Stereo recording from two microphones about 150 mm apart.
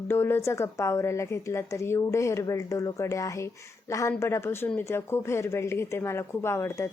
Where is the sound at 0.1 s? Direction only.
15° left (ahead or behind).